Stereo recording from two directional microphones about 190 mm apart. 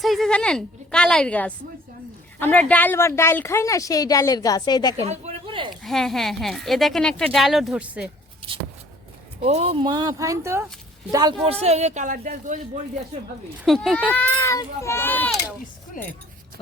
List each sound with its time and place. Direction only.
0.0 s a woman's voice: centre (ahead or behind); by 4.9 s 20° left (ahead or behind)
5.0 s a sound: 35° right (ahead or behind)
5.7 s speech: centre (ahead or behind)
9.4 s speech: 30° right (ahead or behind)
11.6 s a woman's voice: 35° right (ahead or behind)
13.7 s a woman's voice: centre (ahead or behind)
16.0 s speech: 45° left (ahead or behind)